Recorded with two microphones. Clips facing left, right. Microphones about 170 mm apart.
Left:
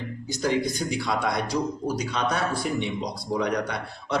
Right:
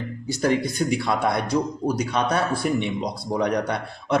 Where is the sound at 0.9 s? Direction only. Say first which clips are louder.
Right 3 dB; 55° right (ahead or behind).